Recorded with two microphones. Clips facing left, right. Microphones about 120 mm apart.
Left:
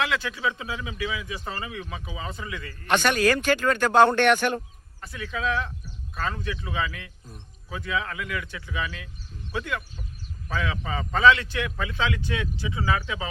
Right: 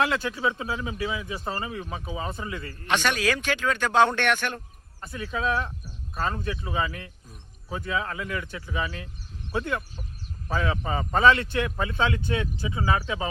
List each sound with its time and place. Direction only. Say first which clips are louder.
0.3 s speech: right 2 dB; 30° right (ahead or behind)
2.8 s speech: left 3 dB; centre (ahead or behind)
4.9 s speech: right 1 dB; 30° right (ahead or behind)
11.5 s speech: right 3 dB; 35° right (ahead or behind)